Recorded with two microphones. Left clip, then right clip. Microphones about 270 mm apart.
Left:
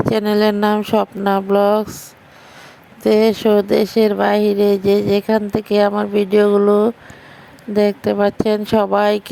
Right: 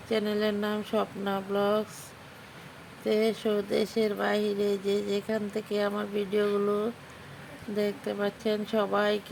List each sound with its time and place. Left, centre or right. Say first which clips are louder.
0.1 s speech: left 10 dB; left
3.0 s speech: left 13 dB; left